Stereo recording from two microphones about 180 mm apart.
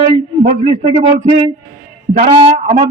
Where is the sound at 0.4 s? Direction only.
45° right (ahead or behind).